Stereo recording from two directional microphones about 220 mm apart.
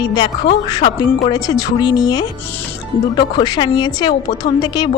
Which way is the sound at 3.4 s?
20° left (ahead or behind).